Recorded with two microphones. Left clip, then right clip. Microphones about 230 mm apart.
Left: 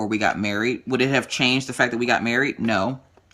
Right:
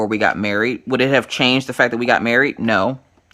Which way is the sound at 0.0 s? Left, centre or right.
Centre.